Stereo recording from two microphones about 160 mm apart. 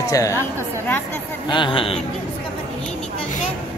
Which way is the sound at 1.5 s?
30° left (ahead or behind).